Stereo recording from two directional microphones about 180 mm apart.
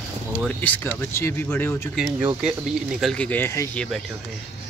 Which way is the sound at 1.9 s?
Centre (ahead or behind).